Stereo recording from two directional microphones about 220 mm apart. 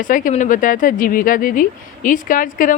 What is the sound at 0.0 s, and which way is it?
Speech, 35° left (ahead or behind).